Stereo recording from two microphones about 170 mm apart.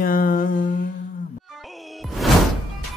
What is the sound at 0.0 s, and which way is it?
Mantra, 55° left (ahead or behind).